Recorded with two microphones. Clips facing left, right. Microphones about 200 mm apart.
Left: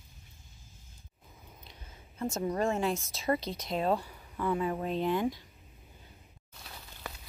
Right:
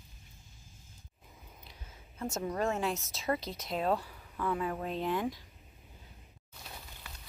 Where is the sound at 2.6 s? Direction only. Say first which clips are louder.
Left 2 dB; centre (ahead or behind).